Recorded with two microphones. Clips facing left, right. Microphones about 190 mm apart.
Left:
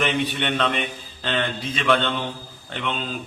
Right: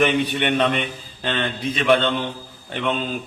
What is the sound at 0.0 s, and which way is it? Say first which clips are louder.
Speech: right 4 dB; 15° right (ahead or behind).